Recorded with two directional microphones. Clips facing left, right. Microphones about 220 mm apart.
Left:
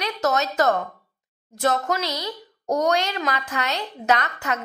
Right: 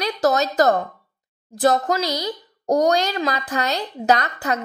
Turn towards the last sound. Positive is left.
turn(degrees=-35)  # may be behind; listen again after turning